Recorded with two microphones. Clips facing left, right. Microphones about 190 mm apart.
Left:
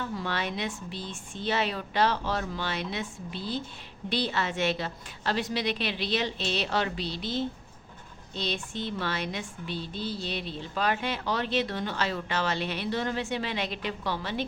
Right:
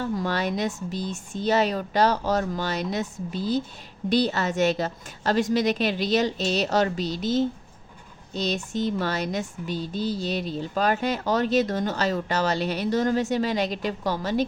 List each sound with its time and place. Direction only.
0.0 s a woman's voice: 40° right (ahead or behind)